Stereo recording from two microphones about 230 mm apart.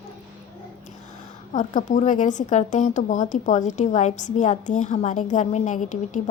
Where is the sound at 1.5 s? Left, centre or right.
Left.